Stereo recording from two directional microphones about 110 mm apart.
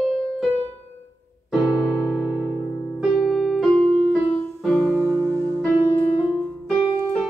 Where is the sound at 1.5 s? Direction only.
Centre (ahead or behind).